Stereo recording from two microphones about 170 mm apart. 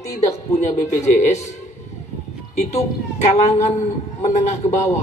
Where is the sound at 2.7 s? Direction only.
40° left (ahead or behind).